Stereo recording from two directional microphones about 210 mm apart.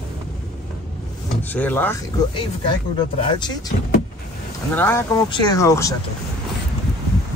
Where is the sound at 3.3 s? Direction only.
20° left (ahead or behind).